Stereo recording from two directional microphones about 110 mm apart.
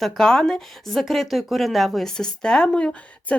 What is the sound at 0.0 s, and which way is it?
Speech, 5° left (ahead or behind).